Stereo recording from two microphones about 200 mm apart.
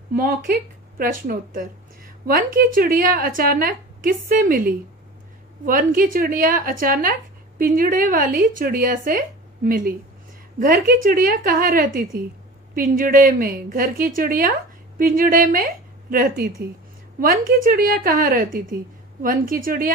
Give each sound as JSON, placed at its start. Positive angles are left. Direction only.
{"t": 0.1, "sound": "a woman's voice", "side_deg": -45}